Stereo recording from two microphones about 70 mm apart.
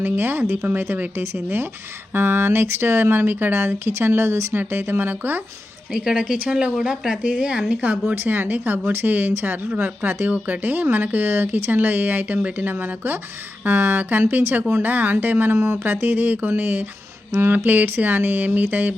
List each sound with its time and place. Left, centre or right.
0.0 s speech: right
5.9 s speech: centre
6.7 s speech: centre; by 7.9 s right
8.0 s speech: right
15.5 s speech: right
15.8 s speech: right